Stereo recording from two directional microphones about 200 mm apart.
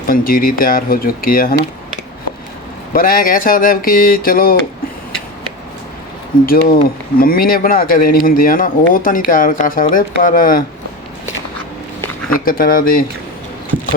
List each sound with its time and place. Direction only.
0.1 s speech: 45° left (ahead or behind)
2.9 s speech: 45° left (ahead or behind)
6.4 s speech: 45° left (ahead or behind)
12.5 s speech: 45° left (ahead or behind)